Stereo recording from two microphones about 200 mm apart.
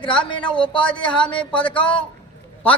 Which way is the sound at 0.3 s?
25° left (ahead or behind).